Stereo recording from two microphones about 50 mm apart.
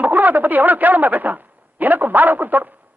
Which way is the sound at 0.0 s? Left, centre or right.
Right.